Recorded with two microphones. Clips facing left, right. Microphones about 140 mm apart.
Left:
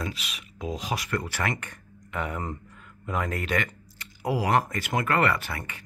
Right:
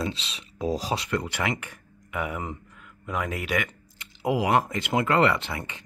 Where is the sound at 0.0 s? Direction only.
25° right (ahead or behind); by 3.7 s 5° right (ahead or behind).